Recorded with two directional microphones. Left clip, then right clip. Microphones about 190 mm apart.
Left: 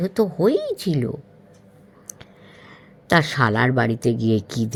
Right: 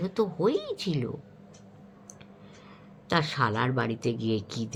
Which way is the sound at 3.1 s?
35° left (ahead or behind).